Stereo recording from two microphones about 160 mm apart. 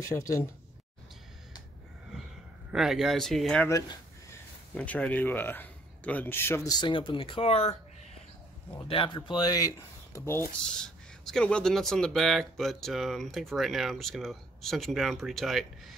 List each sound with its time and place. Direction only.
0.0 s a man's voice: 20° left (ahead or behind)
2.7 s speech: centre (ahead or behind)
4.7 s a man's voice: 10° left (ahead or behind); by 7.7 s 40° left (ahead or behind)
8.8 s speech: 35° left (ahead or behind); by 10.5 s 15° left (ahead or behind)
10.7 s speech: 5° left (ahead or behind)